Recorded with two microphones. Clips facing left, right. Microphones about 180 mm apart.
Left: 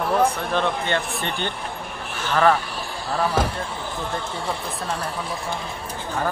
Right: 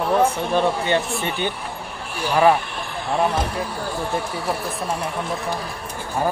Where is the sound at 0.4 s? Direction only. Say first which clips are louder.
Right 3 dB; 15° right (ahead or behind).